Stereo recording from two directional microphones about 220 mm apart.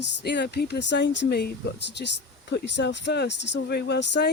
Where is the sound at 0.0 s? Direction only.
50° left (ahead or behind).